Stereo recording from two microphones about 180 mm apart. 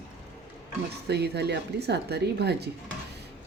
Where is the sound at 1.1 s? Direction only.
65° right (ahead or behind).